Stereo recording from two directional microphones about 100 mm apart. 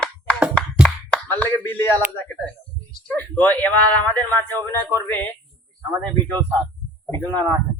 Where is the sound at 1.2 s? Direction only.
20° left (ahead or behind).